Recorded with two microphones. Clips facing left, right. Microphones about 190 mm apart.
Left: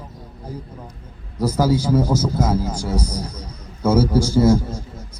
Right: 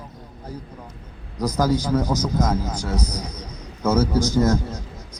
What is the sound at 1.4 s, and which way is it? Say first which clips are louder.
A man's voice: left 3 dB; 10° left (ahead or behind).